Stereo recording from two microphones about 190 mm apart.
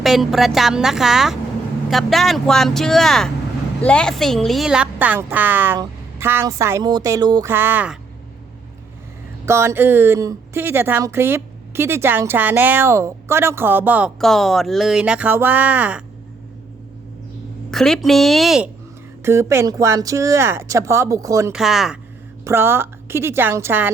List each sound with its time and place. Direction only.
0.0 s speech: centre (ahead or behind)
9.5 s speech: 15° right (ahead or behind)
14.2 s speech: centre (ahead or behind)
17.7 s speech: centre (ahead or behind)
19.2 s speech: 15° right (ahead or behind)
21.5 s speech: centre (ahead or behind)
22.4 s speech: 10° right (ahead or behind)